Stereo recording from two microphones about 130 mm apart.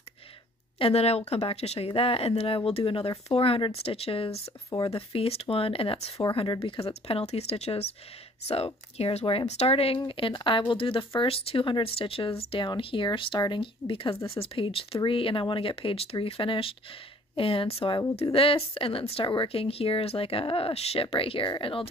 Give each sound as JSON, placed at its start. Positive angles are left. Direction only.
{"t": 0.7, "sound": "speech", "side_deg": 50}
{"t": 4.6, "sound": "speech", "side_deg": 30}
{"t": 4.9, "sound": "speech", "side_deg": 45}